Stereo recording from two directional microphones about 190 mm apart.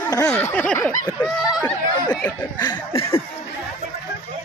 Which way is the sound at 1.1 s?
Centre (ahead or behind).